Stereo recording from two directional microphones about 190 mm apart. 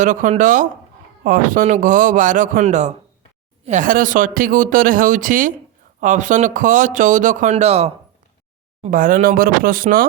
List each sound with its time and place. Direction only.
0.0 s speech: 40° right (ahead or behind)
8.8 s speech: 45° right (ahead or behind)